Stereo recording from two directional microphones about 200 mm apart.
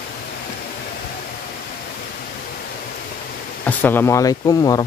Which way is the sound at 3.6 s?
10° left (ahead or behind).